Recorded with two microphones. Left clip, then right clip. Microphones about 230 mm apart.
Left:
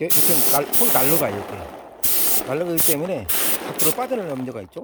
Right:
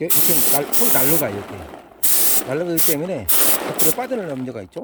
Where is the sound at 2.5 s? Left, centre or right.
Centre.